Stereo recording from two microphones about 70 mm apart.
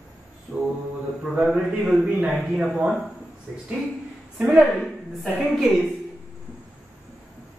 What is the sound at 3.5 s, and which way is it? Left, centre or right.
Speech, right.